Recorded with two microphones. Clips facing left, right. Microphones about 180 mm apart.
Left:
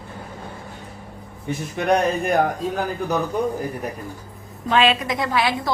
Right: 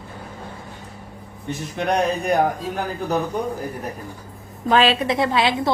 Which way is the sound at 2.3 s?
Centre (ahead or behind).